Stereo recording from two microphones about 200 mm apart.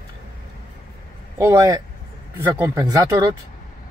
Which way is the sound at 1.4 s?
15° right (ahead or behind).